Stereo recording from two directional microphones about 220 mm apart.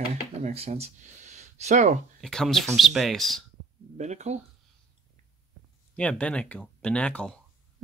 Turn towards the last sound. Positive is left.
turn(degrees=5)  # may be behind; listen again after turning